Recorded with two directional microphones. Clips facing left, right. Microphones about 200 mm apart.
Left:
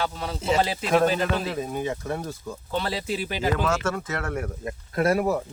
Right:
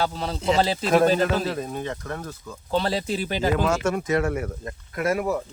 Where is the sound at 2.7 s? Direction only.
40° right (ahead or behind).